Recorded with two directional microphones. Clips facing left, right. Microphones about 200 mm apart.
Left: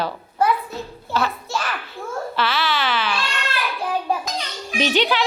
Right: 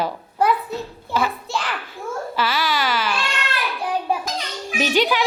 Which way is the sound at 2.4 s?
10° right (ahead or behind).